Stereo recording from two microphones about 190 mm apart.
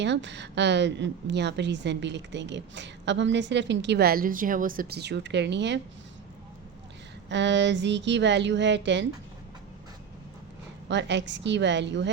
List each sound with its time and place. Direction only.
0.0 s a woman's voice: 70° right (ahead or behind)
7.3 s a woman's voice: 70° right (ahead or behind)
10.8 s a woman's voice: 70° right (ahead or behind)